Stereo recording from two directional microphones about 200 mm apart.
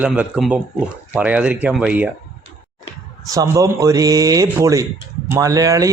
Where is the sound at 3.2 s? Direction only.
15° right (ahead or behind).